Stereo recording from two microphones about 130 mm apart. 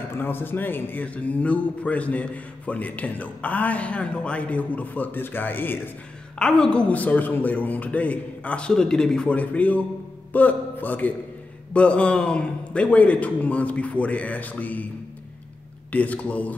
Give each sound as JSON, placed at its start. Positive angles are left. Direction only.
{"t": 0.1, "sound": "a man's voice", "side_deg": 15}
{"t": 15.9, "sound": "a man's voice", "side_deg": 10}